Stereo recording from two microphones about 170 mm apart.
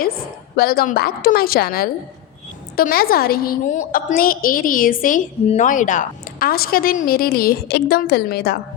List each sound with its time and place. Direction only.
0.5 s a woman's voice: 65° left (ahead or behind)